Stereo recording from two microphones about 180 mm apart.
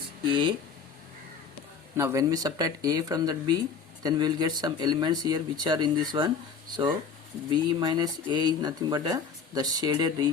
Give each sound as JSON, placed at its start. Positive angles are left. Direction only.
{"t": 0.3, "sound": "speech", "side_deg": -25}
{"t": 2.0, "sound": "speech", "side_deg": -15}